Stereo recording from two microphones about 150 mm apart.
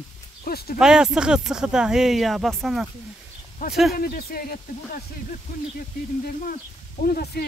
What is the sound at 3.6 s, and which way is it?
Speech, 75° left (ahead or behind).